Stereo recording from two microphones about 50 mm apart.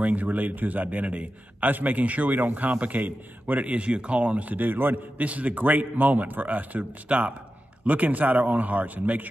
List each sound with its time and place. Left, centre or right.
0.0 s a man's voice: right
5.2 s a man's voice: right